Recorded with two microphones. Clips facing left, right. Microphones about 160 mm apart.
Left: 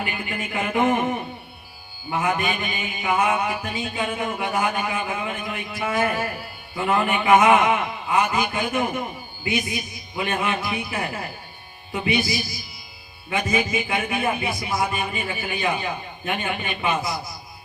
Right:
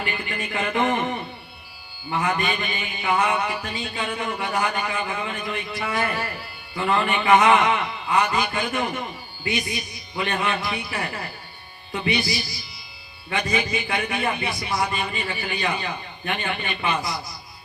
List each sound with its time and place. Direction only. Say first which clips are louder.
0.0 s a man's voice: even; 10° left (ahead or behind)
13.5 s a man's voice: left 2 dB; 10° left (ahead or behind)